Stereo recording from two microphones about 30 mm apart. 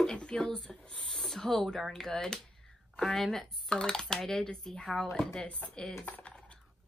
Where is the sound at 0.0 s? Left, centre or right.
Left.